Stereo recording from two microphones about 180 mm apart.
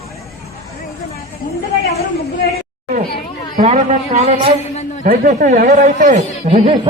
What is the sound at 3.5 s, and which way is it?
A man's voice, 45° right (ahead or behind).